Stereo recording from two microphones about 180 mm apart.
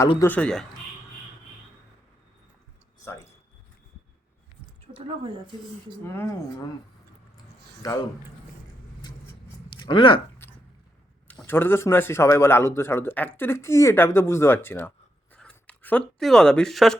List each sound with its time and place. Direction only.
0.3 s speech: 5° left (ahead or behind)
3.0 s a sound: 15° left (ahead or behind)
6.1 s speech: 15° left (ahead or behind)
9.0 s vehicle: 25° left (ahead or behind)
9.6 s a sound: 25° left (ahead or behind)
11.3 s speech: 10° left (ahead or behind)